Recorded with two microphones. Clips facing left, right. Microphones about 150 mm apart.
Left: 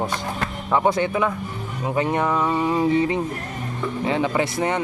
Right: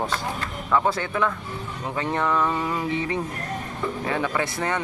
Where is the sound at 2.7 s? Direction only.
25° left (ahead or behind).